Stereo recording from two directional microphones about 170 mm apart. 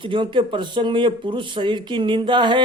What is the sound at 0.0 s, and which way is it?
Speech, 30° right (ahead or behind).